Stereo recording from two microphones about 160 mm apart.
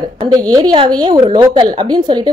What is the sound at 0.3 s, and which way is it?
A woman's voice, 25° right (ahead or behind).